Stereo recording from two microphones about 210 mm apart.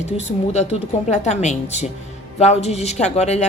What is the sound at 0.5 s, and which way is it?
A woman's voice, 35° left (ahead or behind).